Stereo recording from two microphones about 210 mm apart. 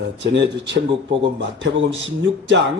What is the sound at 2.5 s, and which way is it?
Speech, 55° right (ahead or behind).